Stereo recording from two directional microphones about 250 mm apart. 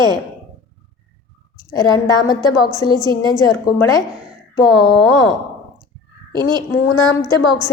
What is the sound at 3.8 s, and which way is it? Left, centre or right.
Speech, centre.